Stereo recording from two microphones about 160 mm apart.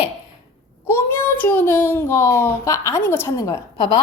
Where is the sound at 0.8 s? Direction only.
15° left (ahead or behind).